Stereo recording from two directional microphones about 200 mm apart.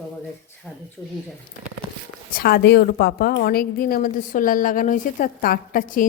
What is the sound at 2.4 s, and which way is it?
A woman's voice, 50° left (ahead or behind).